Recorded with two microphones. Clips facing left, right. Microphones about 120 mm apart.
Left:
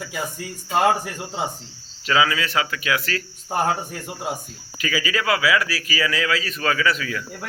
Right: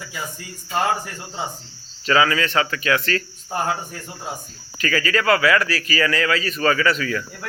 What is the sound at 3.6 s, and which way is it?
Speech, 55° left (ahead or behind).